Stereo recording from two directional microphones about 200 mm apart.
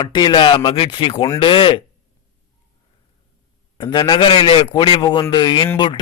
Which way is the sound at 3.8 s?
20° left (ahead or behind).